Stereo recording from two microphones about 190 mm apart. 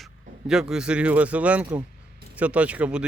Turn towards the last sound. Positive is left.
turn(degrees=-5)  # may be behind; listen again after turning